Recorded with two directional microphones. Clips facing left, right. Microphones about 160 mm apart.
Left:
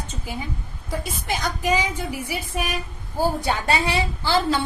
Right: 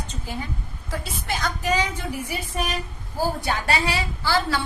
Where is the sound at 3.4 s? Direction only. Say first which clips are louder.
Left 2 dB; 25° left (ahead or behind).